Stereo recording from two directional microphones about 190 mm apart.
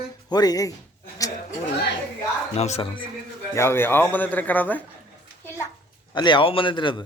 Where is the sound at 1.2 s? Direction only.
15° left (ahead or behind).